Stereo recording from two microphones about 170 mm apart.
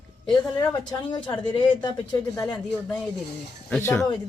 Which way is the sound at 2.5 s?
5° left (ahead or behind).